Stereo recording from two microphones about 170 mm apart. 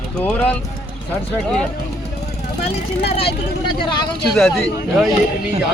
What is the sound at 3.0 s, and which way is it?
Speech, 35° left (ahead or behind).